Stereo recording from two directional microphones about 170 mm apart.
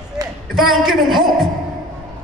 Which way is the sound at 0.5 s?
Centre (ahead or behind).